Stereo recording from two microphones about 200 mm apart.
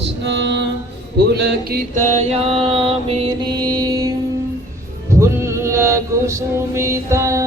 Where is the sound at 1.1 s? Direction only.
55° right (ahead or behind); by 3.3 s 30° right (ahead or behind).